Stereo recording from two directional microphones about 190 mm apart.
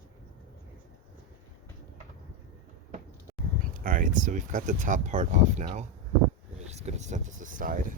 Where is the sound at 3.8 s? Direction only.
45° right (ahead or behind).